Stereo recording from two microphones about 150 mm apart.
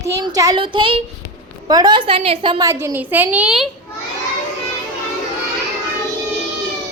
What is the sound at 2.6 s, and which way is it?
A woman's voice, 20° right (ahead or behind).